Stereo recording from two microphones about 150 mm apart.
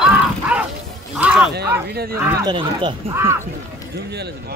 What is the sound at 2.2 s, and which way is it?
Speech, 20° right (ahead or behind).